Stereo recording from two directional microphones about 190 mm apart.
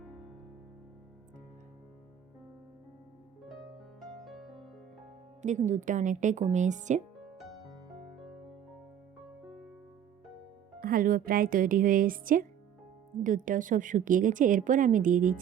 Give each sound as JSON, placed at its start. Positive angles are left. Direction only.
{"t": 4.2, "sound": "music", "side_deg": 0}
{"t": 5.4, "sound": "a woman's voice", "side_deg": -40}
{"t": 10.8, "sound": "a woman's voice", "side_deg": -50}